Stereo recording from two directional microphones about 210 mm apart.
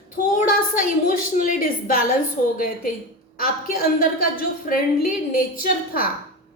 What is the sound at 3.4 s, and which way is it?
A woman's voice, 45° left (ahead or behind).